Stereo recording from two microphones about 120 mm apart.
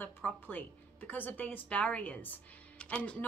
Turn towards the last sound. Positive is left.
turn(degrees=10)  # may be behind; listen again after turning